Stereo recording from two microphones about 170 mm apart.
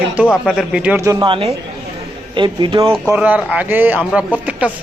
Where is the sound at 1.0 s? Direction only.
30° right (ahead or behind).